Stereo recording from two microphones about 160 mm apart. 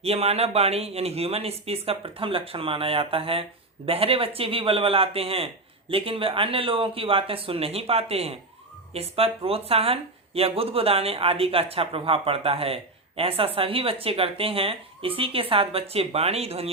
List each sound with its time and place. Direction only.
0.0 s speech: 40° right (ahead or behind)